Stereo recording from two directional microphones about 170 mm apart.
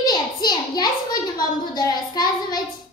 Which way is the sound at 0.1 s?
25° left (ahead or behind).